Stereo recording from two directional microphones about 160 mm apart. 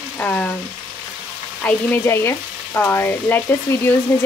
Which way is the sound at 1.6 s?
10° left (ahead or behind).